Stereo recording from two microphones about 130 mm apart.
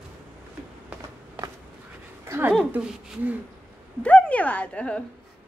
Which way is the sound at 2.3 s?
15° right (ahead or behind).